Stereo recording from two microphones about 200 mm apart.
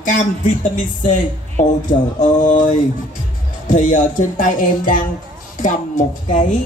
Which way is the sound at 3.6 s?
40° left (ahead or behind).